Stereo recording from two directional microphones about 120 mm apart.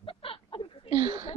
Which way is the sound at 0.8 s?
45° right (ahead or behind).